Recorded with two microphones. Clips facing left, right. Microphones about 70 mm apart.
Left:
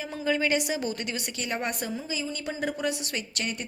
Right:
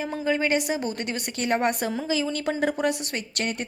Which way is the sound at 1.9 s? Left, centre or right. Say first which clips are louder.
Right 7 dB; right.